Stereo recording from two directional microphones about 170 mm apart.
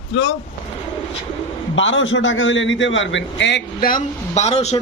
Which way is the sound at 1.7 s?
90° left.